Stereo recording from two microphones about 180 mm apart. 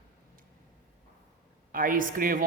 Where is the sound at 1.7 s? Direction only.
50° right (ahead or behind).